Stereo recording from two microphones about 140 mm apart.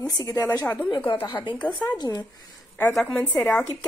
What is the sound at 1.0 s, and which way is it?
Speech, 10° left (ahead or behind).